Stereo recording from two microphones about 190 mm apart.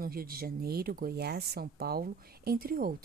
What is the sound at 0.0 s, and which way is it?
A woman's voice, 50° right (ahead or behind).